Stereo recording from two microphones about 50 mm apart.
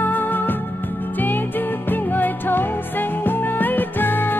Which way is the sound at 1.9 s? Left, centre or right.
Left.